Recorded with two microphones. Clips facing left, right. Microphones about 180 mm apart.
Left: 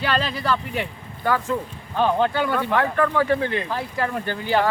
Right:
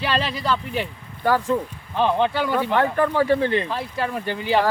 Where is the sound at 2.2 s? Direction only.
20° right (ahead or behind).